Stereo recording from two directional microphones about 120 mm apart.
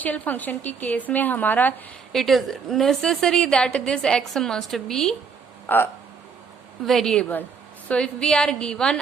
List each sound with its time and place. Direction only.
0.0 s a woman's voice: 15° left (ahead or behind)
2.1 s a woman's voice: centre (ahead or behind)
5.6 s speech: 15° left (ahead or behind)
6.8 s a woman's voice: 5° left (ahead or behind)